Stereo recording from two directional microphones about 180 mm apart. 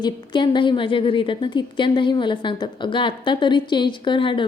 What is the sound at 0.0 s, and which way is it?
A woman's voice, 25° left (ahead or behind).